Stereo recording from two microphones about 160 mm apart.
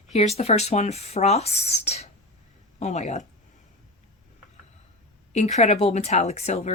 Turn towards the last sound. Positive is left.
turn(degrees=45)  # may be behind; listen again after turning